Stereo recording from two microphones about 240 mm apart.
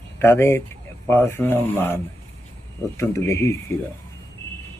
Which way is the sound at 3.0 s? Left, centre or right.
Centre.